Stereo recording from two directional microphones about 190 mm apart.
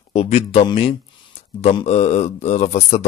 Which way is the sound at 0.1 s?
35° left (ahead or behind).